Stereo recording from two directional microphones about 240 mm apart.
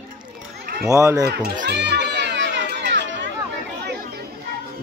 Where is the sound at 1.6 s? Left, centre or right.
Right.